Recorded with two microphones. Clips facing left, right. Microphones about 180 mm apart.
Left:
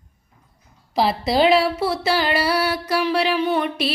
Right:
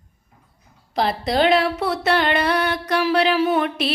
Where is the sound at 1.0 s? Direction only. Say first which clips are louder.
Left 1 dB; centre (ahead or behind).